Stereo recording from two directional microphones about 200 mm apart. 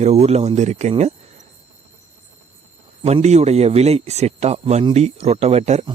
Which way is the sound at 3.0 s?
35° right (ahead or behind).